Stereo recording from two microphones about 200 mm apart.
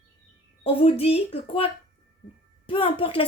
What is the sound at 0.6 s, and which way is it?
Speech, 30° left (ahead or behind).